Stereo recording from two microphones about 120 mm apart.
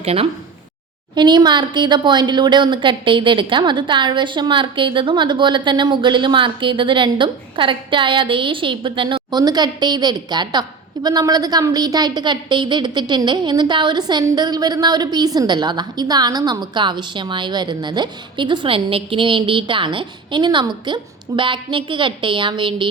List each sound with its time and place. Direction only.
0.0 s speech: 55° right (ahead or behind)
1.1 s a woman's voice: 40° right (ahead or behind)
9.4 s a woman's voice: 35° right (ahead or behind)